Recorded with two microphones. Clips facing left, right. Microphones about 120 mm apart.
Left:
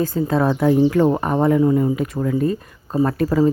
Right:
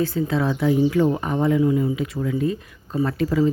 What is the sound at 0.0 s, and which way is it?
Speech, 45° left (ahead or behind).